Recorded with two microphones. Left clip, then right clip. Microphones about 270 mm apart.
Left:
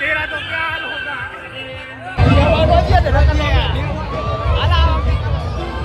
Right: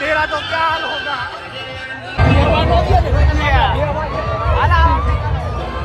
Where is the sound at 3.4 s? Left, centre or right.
Centre.